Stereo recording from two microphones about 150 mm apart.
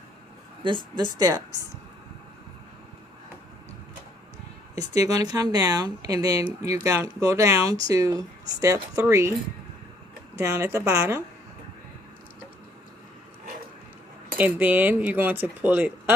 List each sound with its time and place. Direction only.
0.9 s speech: 30° right (ahead or behind)
4.7 s speech: 25° right (ahead or behind)
10.3 s speech: 20° right (ahead or behind)
14.3 s speech: 10° right (ahead or behind)